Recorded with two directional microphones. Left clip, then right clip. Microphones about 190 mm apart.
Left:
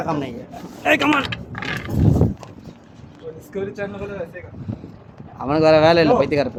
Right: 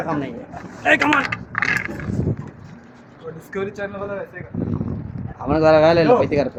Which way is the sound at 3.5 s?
55° right (ahead or behind).